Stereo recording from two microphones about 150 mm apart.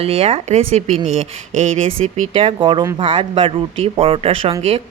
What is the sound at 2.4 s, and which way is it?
Speech, 35° right (ahead or behind).